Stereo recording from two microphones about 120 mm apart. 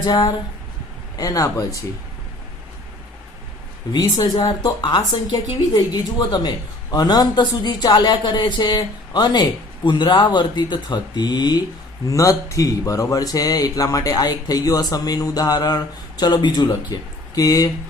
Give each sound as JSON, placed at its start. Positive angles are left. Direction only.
{"t": 0.0, "sound": "speech", "side_deg": 35}
{"t": 3.9, "sound": "speech", "side_deg": 35}